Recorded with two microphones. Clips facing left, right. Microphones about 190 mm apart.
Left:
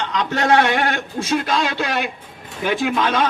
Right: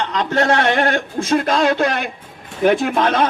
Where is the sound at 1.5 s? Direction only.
50° right (ahead or behind).